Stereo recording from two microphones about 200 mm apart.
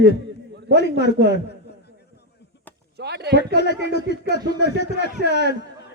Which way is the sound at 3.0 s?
55° right (ahead or behind).